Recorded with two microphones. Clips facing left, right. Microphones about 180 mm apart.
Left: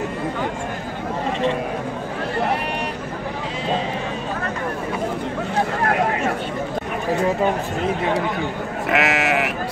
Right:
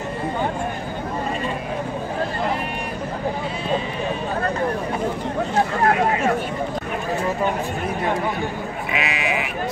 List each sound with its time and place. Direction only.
8.9 s sheep: 85° left